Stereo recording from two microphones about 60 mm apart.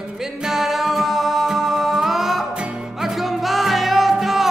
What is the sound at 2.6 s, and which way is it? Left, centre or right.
Music, centre.